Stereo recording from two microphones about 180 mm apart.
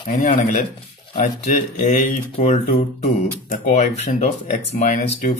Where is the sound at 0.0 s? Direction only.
40° left (ahead or behind).